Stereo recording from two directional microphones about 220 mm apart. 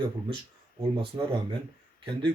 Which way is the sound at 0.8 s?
20° right (ahead or behind).